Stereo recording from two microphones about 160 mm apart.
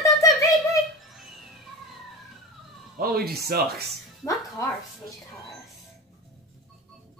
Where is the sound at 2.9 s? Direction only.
70° right (ahead or behind).